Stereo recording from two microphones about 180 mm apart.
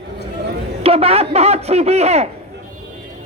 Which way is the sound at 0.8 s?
35° right (ahead or behind).